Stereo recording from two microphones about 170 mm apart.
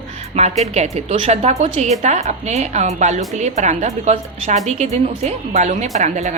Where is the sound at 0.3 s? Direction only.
40° right (ahead or behind).